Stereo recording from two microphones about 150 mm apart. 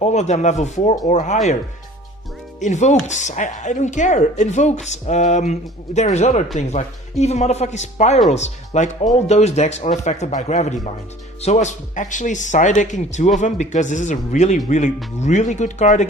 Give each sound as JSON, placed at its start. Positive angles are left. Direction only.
{"t": 0.0, "sound": "speech", "side_deg": 50}
{"t": 2.6, "sound": "speech", "side_deg": 50}